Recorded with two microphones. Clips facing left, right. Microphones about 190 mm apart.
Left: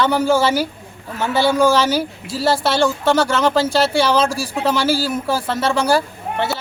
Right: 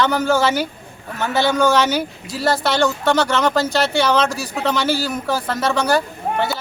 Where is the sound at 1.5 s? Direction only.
10° left (ahead or behind).